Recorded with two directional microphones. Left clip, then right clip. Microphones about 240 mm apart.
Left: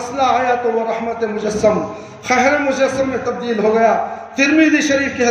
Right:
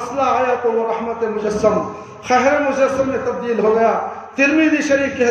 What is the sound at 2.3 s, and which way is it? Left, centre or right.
A man's voice, centre.